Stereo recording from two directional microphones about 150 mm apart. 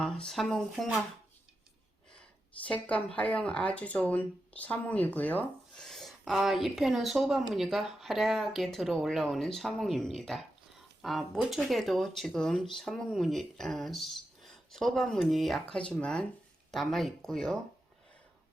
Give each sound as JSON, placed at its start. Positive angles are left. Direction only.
{"t": 0.0, "sound": "speech", "side_deg": 5}
{"t": 2.6, "sound": "speech", "side_deg": 10}